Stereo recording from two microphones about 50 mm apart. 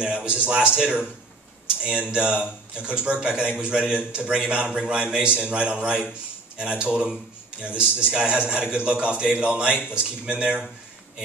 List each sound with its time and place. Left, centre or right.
0.0 s a man's voice: centre
1.8 s a man's voice: centre